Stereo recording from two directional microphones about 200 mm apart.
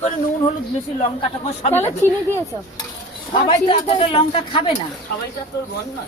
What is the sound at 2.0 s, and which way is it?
Speech, 10° left (ahead or behind).